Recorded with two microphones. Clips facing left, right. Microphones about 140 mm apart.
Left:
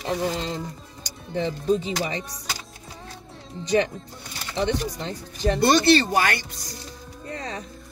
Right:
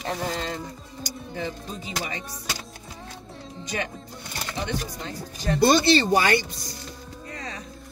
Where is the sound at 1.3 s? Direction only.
30° left (ahead or behind).